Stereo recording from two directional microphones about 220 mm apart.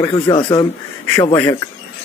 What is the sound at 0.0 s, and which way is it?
Speech, 20° left (ahead or behind).